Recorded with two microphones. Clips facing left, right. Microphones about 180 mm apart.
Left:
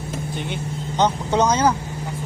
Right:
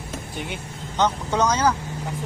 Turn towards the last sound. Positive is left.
turn(degrees=25)  # may be behind; listen again after turning